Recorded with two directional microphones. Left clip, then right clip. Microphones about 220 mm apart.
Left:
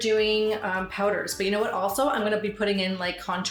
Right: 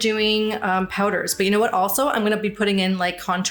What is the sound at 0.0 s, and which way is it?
A woman's voice, 55° right (ahead or behind).